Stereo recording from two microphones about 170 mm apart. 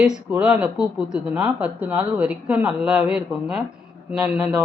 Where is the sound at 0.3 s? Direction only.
5° right (ahead or behind).